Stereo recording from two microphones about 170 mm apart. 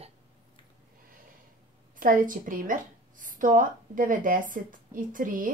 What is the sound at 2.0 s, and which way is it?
A woman's voice, 50° right (ahead or behind).